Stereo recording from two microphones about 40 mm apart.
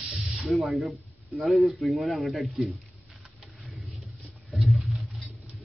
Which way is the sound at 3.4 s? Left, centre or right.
Centre.